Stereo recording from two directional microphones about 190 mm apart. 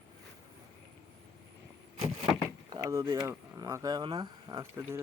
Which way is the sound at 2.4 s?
20° right (ahead or behind).